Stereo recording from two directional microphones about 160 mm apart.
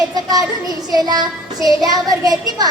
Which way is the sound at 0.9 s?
25° right (ahead or behind).